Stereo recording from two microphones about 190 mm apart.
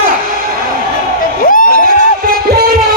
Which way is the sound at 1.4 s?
45° left (ahead or behind).